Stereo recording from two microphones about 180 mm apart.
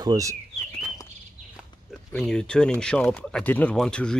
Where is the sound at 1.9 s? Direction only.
5° left (ahead or behind).